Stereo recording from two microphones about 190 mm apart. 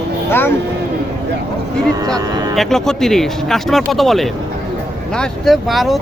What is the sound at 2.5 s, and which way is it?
Speech, centre (ahead or behind).